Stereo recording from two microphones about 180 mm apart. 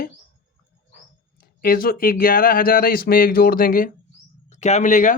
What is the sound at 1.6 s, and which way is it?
Speech, 55° left (ahead or behind).